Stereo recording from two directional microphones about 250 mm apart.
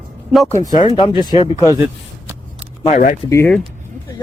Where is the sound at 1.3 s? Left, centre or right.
Centre.